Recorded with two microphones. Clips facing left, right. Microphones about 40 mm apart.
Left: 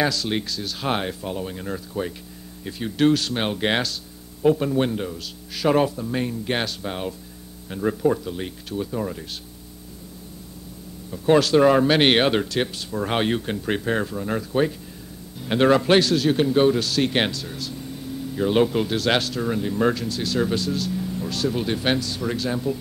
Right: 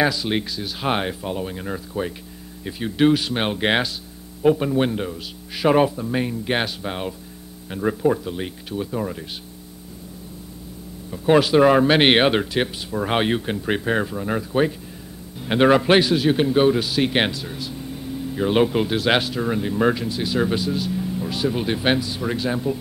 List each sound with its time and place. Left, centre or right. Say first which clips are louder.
0.0 s a man's voice: right 2 dB; centre
11.1 s a man's voice: right 1 dB; centre